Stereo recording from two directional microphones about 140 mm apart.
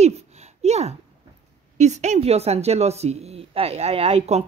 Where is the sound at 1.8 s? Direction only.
55° right (ahead or behind).